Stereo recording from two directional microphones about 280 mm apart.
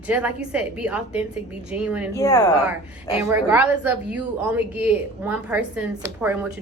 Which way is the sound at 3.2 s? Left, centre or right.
Centre.